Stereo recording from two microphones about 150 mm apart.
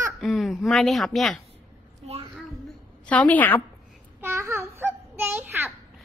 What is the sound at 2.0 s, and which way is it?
Child singing, 45° right (ahead or behind).